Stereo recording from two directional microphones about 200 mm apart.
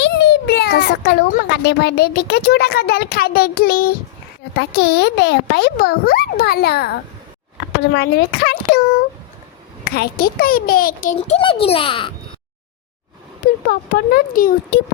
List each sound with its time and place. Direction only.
0.0 s a child's voice: 55° left (ahead or behind)
11.3 s a child's voice: 25° left (ahead or behind)
13.7 s a child's voice: 50° left (ahead or behind)